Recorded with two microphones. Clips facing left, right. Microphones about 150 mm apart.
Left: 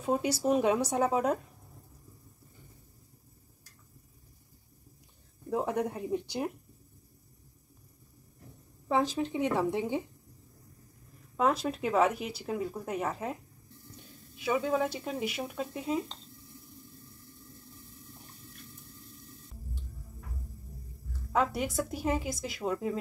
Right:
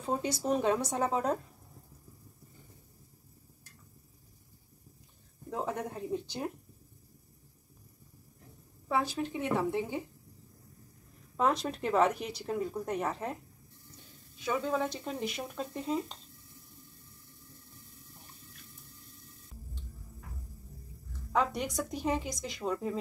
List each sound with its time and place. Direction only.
0.0 s a woman's voice: 10° left (ahead or behind)
5.5 s a woman's voice: 15° left (ahead or behind)
8.8 s a woman's voice: 15° left (ahead or behind)
11.3 s speech: 5° left (ahead or behind)
14.4 s speech: 10° left (ahead or behind)
21.3 s speech: 5° left (ahead or behind)